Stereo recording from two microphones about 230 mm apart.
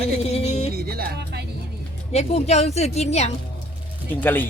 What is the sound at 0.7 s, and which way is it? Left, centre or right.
Music, right.